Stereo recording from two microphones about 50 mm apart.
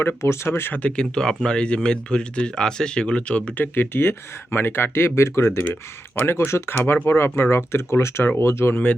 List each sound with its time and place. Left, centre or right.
0.4 s speech: left
0.7 s speech: left
0.9 s speech: centre
3.6 s speech: left
6.1 s speech: left